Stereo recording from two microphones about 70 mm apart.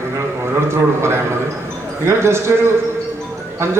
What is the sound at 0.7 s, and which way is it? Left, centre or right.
A man's voice, right.